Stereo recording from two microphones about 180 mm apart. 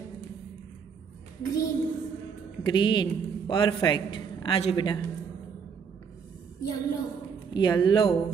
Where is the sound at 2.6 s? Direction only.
25° left (ahead or behind).